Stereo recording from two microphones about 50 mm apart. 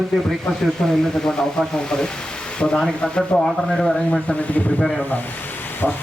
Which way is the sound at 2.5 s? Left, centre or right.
Centre.